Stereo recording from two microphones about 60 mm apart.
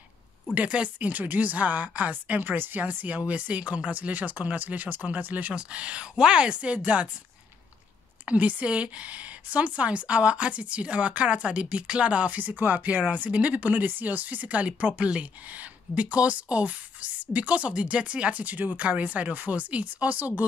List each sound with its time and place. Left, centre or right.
0.6 s speech: right
8.3 s speech: right